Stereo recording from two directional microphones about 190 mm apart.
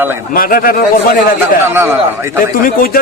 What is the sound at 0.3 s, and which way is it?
Speech, 50° left (ahead or behind).